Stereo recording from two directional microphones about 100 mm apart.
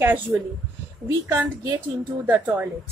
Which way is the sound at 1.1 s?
40° right (ahead or behind).